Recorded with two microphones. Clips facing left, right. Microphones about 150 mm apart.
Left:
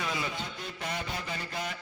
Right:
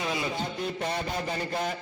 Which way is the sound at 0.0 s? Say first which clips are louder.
Right 4 dB; 25° right (ahead or behind).